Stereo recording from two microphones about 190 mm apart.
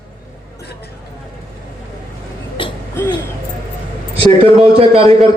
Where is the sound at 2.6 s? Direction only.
25° left (ahead or behind).